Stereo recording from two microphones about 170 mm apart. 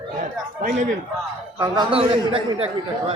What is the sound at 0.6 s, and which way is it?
Speech, 55° right (ahead or behind).